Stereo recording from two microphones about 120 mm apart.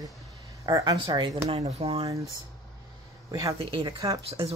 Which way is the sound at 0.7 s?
35° right (ahead or behind).